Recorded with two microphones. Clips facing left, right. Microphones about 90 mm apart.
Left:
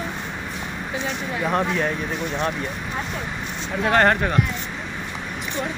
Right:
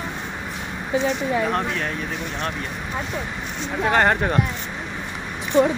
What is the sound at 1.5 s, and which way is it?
Speech, 10° left (ahead or behind).